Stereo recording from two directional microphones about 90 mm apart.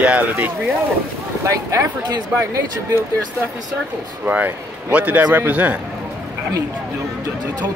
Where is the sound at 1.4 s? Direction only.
35° right (ahead or behind).